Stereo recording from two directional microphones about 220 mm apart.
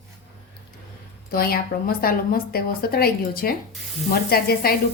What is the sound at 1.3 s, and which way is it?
A woman's voice, 45° left (ahead or behind).